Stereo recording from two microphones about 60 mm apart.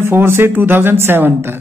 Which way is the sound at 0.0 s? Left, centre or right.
Right.